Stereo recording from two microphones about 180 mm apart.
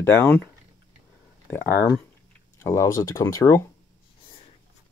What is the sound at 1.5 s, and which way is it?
Speech, 15° left (ahead or behind).